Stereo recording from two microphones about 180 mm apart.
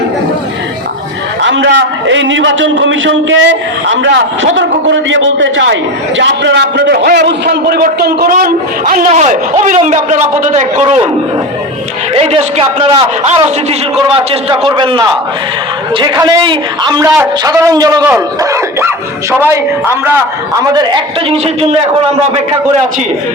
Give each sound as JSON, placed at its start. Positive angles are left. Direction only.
{"t": 1.4, "sound": "a man's voice", "side_deg": -90}
{"t": 6.1, "sound": "a man's voice", "side_deg": -75}
{"t": 12.1, "sound": "a man's voice", "side_deg": -35}